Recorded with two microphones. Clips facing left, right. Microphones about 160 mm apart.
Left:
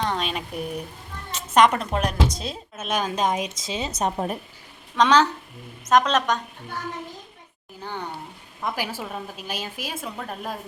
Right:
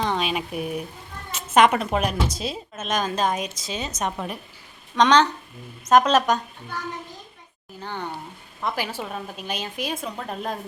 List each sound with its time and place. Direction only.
0.0 s a woman's voice: 5° right (ahead or behind)
2.7 s a woman's voice: 10° left (ahead or behind)
3.2 s a woman's voice: 25° left (ahead or behind)
4.9 s a woman's voice: 5° left (ahead or behind)
7.8 s a woman's voice: 10° left (ahead or behind)